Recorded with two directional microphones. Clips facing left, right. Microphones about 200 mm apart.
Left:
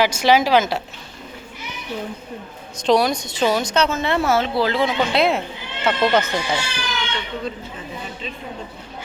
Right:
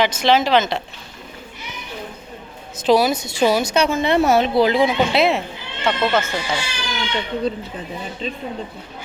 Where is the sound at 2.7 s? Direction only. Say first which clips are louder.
Right 1 dB; 5° right (ahead or behind).